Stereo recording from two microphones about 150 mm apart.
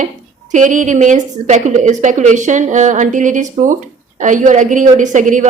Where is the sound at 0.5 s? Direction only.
55° right (ahead or behind).